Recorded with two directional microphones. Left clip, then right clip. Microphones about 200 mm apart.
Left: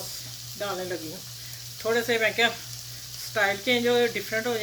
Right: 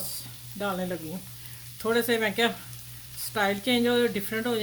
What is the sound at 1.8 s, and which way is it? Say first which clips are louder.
Speech: left 1 dB; 55° right (ahead or behind).